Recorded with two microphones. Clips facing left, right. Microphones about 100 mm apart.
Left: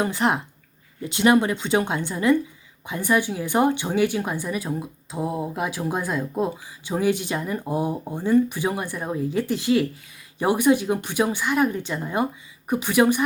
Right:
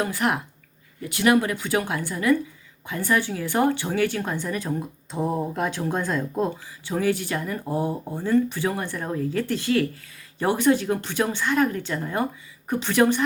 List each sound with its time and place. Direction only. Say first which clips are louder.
0.0 s a woman's voice: left 2 dB; 25° left (ahead or behind)